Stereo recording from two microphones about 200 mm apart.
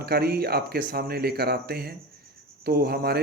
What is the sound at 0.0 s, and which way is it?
Speech, 50° right (ahead or behind).